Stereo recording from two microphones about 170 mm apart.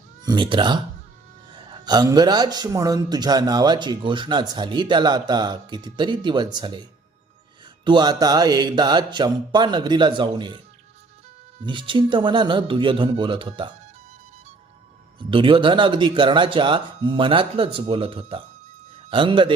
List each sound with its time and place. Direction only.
0.3 s speech: 30° right (ahead or behind)
7.9 s speech: 25° right (ahead or behind)
11.6 s speech: 30° right (ahead or behind)
15.3 s speech: 30° right (ahead or behind)